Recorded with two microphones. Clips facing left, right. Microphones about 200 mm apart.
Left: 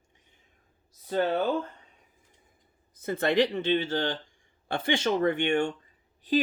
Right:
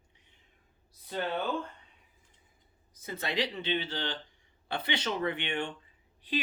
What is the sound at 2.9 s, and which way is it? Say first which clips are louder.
Speech: left 10 dB; 55° left (ahead or behind).